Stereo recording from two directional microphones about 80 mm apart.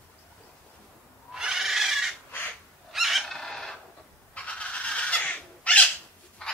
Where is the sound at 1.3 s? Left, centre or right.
Centre.